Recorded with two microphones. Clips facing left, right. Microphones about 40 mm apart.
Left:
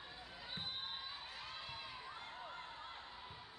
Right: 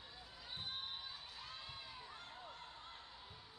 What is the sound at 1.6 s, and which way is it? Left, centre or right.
Crowd, left.